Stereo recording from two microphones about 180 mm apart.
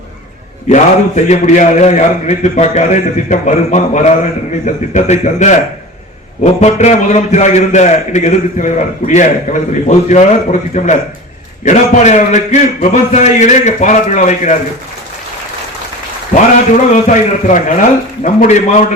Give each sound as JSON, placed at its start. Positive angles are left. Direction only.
{"t": 0.7, "sound": "a man's voice", "side_deg": 40}
{"t": 16.3, "sound": "a man's voice", "side_deg": 45}